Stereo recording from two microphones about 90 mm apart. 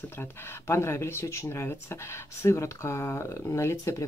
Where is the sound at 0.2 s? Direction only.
30° left (ahead or behind).